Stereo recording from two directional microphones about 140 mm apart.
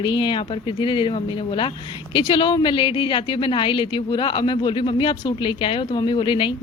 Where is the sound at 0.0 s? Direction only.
35° left (ahead or behind).